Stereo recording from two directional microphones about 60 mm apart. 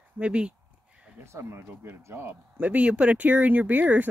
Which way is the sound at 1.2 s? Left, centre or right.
Right.